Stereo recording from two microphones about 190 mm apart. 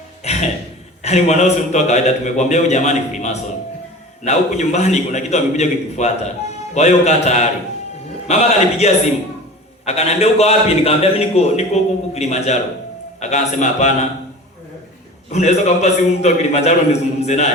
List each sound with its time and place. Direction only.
0.2 s a sound: 35° left (ahead or behind)
1.0 s a man's voice: 35° left (ahead or behind)
15.3 s a man's voice: 35° left (ahead or behind)